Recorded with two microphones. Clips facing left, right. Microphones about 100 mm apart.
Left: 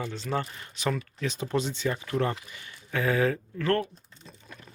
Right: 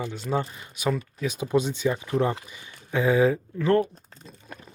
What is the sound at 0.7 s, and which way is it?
Speech, 10° right (ahead or behind).